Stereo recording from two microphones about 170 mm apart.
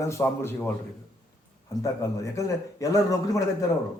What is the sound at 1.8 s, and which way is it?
A man's voice, 20° left (ahead or behind).